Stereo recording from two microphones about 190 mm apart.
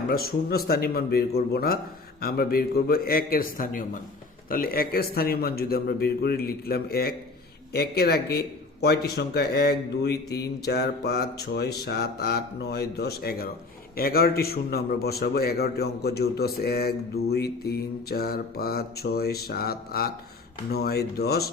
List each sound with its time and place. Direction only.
0.1 s a man's voice: 55° left (ahead or behind)